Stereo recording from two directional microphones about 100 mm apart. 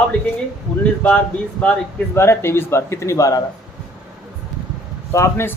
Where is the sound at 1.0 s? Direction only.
15° left (ahead or behind).